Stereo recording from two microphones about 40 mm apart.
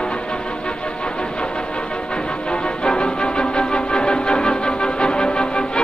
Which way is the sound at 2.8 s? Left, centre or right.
Left.